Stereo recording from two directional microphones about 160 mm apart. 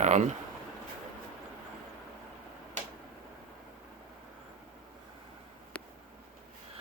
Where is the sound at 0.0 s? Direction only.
45° right (ahead or behind).